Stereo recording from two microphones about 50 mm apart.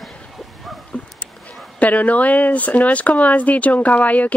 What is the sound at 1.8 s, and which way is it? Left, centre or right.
Speech, left.